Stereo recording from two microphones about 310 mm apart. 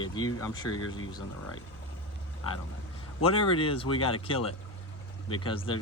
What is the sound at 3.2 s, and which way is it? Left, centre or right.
Speech, centre.